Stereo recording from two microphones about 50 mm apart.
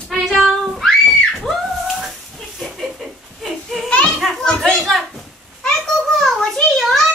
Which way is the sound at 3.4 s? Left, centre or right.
Centre.